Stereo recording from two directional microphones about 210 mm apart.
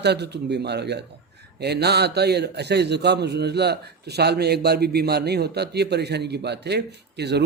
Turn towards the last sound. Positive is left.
turn(degrees=-50)  # may be behind; listen again after turning